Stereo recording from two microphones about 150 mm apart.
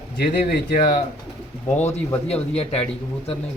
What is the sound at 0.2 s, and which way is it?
Speech, 90° left.